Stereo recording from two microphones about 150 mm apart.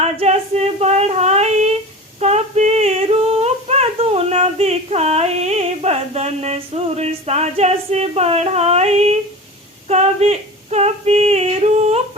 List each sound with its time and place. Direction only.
0.0 s female singing: 45° right (ahead or behind)
2.2 s singing: 45° right (ahead or behind)
9.9 s female singing: 45° right (ahead or behind)